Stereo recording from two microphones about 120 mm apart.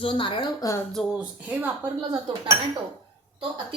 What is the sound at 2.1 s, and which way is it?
Speech, 30° right (ahead or behind).